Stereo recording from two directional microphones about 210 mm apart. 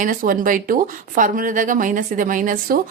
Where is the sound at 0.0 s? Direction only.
40° right (ahead or behind).